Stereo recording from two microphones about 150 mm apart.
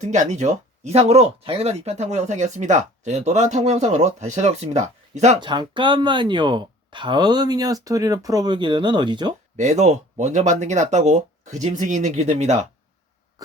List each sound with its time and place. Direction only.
0.0 s speech: 50° right (ahead or behind)
5.4 s speech: 30° right (ahead or behind)
9.6 s speech: 50° right (ahead or behind)